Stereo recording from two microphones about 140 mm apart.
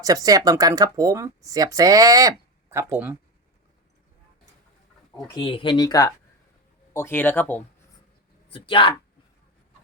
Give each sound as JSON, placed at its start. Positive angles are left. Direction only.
{"t": 0.0, "sound": "speech", "side_deg": -25}
{"t": 5.1, "sound": "speech", "side_deg": 30}
{"t": 8.5, "sound": "speech", "side_deg": 40}